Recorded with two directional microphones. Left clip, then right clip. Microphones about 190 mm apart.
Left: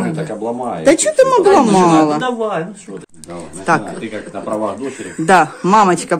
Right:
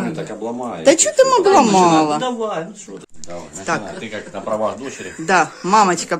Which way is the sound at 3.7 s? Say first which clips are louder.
Left 7 dB; 20° left (ahead or behind).